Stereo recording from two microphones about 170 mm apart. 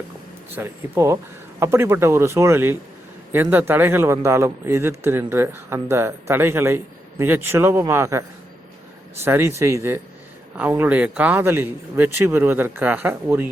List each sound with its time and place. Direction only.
0.5 s speech: 15° right (ahead or behind)
9.2 s speech: 15° right (ahead or behind)